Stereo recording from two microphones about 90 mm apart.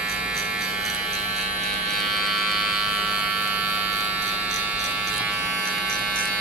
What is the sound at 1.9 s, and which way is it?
Electric shaver, centre (ahead or behind).